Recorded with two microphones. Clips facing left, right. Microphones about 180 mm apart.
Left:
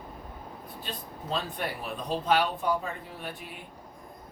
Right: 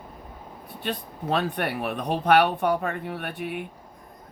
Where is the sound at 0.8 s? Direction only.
65° right (ahead or behind).